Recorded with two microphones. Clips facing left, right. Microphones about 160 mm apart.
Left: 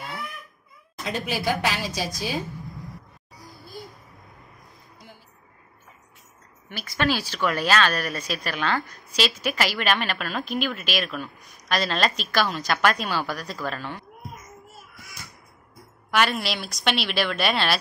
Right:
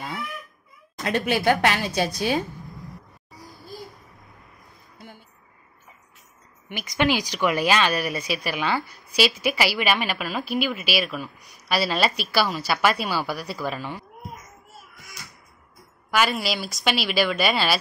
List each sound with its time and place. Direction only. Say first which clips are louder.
1.0 s a woman's voice: right 5 dB; 65° right (ahead or behind)
6.7 s speech: right 2 dB; 15° right (ahead or behind)
16.1 s speech: right 1 dB; centre (ahead or behind)